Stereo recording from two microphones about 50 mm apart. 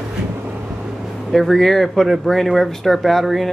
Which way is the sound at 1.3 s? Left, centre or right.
Centre.